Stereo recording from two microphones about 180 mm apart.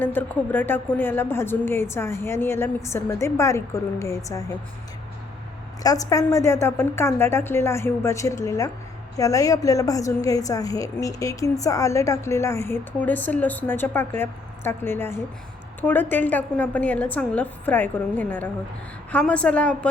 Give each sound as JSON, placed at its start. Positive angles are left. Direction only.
{"t": 0.0, "sound": "a woman's voice", "side_deg": 10}
{"t": 5.8, "sound": "a woman's voice", "side_deg": 20}